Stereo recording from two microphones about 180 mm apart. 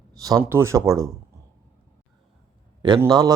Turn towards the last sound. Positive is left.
turn(degrees=-20)  # may be behind; listen again after turning